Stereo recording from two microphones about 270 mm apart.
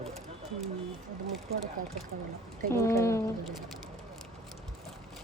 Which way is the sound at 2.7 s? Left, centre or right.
Centre.